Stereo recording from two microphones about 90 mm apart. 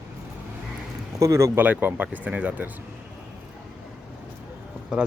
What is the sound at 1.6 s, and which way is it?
Speech, 20° right (ahead or behind).